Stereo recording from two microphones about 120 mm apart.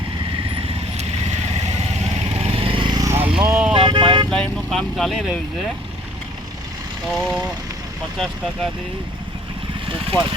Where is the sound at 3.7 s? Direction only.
40° right (ahead or behind).